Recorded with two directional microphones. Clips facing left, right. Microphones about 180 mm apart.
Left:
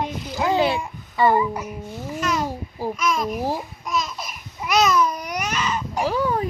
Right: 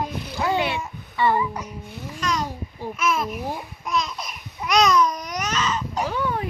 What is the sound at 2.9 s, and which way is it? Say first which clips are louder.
Speech: right 1 dB; 5° right (ahead or behind).